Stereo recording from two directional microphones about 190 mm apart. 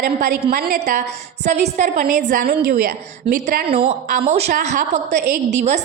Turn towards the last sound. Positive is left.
turn(degrees=-35)  # may be behind; listen again after turning